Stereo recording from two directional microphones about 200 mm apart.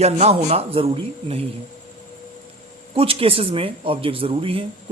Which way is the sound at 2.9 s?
25° right (ahead or behind).